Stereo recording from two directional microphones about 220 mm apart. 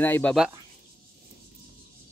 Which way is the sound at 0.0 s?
5° left (ahead or behind).